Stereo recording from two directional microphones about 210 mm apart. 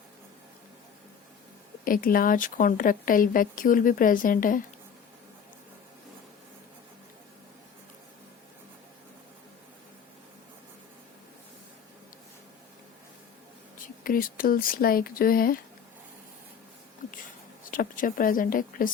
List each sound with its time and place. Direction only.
1.8 s a woman's voice: 40° left (ahead or behind)
13.8 s speech: 40° left (ahead or behind)
17.7 s a woman's voice: 40° left (ahead or behind)